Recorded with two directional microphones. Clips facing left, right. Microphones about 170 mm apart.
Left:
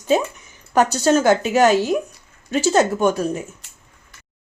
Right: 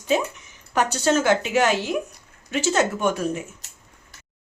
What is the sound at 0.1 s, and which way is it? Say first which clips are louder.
Speech: left 4 dB; 40° left (ahead or behind).